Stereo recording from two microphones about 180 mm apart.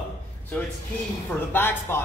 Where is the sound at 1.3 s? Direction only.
10° left (ahead or behind).